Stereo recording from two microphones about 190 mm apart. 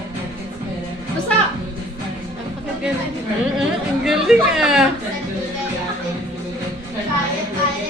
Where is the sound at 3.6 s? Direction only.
Centre (ahead or behind).